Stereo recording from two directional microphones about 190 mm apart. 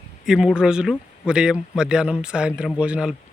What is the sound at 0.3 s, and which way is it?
Speech, centre (ahead or behind).